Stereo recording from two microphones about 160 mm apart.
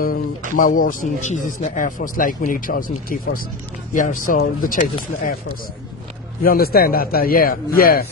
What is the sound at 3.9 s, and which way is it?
Speech, 55° left (ahead or behind).